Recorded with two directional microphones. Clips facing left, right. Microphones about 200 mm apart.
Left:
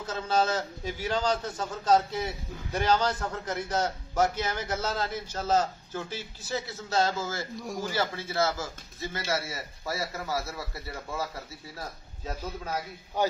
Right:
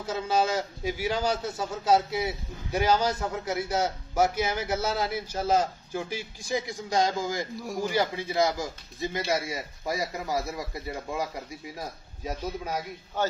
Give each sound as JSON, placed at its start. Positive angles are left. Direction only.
{"t": 0.0, "sound": "a man's voice", "side_deg": -10}
{"t": 13.2, "sound": "a man's voice", "side_deg": 15}